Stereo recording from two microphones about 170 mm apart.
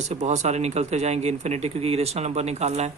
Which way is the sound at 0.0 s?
40° right (ahead or behind).